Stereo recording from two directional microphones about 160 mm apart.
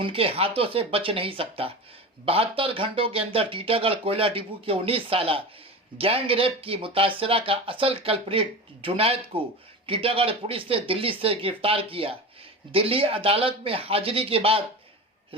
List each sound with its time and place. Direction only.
0.0 s speech: 35° right (ahead or behind)